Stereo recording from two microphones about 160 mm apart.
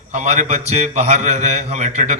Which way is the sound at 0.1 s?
45° right (ahead or behind).